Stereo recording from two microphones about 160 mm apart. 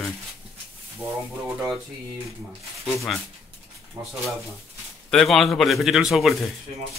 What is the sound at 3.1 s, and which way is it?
Speech, centre (ahead or behind).